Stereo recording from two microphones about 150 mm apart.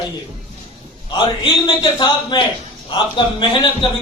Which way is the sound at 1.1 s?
35° left (ahead or behind).